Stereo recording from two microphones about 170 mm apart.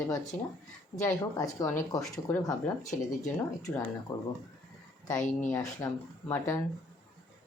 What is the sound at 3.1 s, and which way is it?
Speech, 20° left (ahead or behind).